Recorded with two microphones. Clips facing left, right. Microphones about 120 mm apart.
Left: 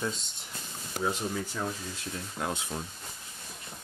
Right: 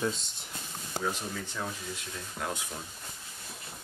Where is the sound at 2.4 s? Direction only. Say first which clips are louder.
Left 2 dB; 25° left (ahead or behind).